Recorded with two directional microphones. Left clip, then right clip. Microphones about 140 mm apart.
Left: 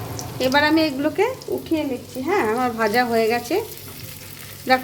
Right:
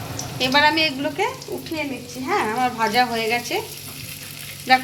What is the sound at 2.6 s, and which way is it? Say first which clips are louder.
Frying: right 1 dB; 75° left (ahead or behind).